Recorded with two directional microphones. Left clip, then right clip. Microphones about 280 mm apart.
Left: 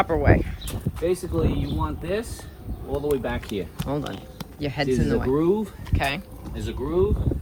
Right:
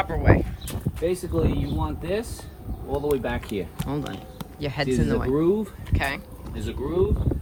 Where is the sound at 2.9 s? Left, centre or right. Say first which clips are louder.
Even; centre.